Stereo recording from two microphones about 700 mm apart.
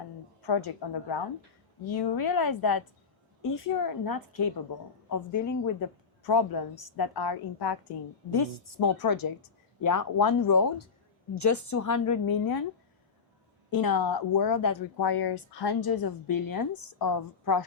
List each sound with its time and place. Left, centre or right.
0.4 s a woman's voice: left
13.7 s speech: left